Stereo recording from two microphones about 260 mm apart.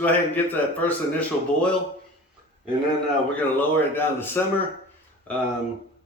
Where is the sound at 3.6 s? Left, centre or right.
Centre.